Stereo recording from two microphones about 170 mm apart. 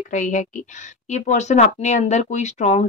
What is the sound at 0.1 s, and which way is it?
Speech, 45° left (ahead or behind).